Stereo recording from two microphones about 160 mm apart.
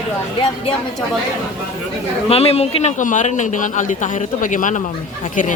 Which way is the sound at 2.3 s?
40° left (ahead or behind).